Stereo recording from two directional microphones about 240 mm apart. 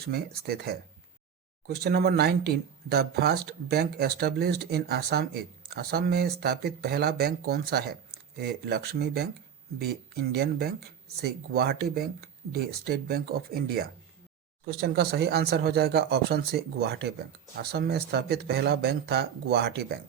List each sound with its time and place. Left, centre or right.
0.0 s speech: right